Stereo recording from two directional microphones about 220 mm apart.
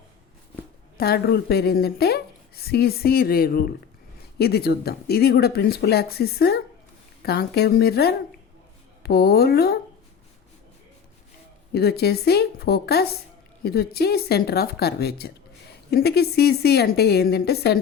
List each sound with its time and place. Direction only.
0.9 s a woman's voice: 45° left (ahead or behind)
11.7 s a woman's voice: 45° left (ahead or behind)